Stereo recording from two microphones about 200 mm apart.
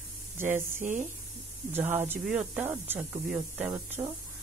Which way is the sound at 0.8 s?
40° right (ahead or behind).